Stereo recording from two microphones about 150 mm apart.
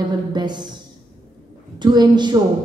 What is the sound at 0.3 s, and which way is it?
Speech, 30° right (ahead or behind).